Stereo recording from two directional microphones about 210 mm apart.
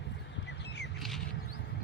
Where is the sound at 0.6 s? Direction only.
55° left (ahead or behind).